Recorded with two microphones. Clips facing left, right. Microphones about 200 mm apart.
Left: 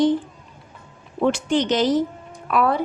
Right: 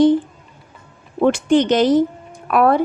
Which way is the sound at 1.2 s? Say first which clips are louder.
Right 5 dB; 55° right (ahead or behind).